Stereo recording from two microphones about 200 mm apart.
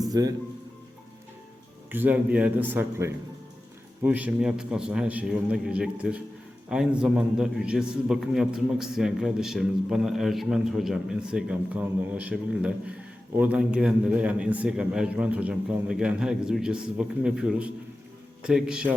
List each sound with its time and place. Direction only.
0.1 s speech: 20° right (ahead or behind)
1.9 s a man's voice: 10° right (ahead or behind)